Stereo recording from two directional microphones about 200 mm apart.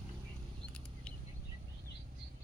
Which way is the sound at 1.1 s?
5° left (ahead or behind).